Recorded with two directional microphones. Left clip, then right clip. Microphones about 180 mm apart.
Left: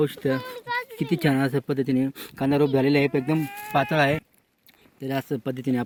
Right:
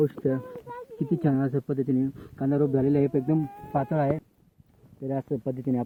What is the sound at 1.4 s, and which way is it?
Speech, 20° left (ahead or behind).